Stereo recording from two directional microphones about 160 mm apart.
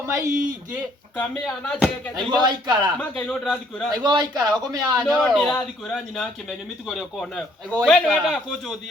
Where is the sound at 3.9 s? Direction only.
25° right (ahead or behind).